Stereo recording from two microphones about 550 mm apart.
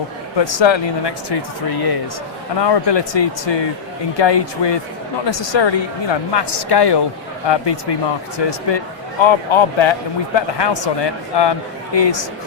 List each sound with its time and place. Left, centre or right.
0.3 s speech: left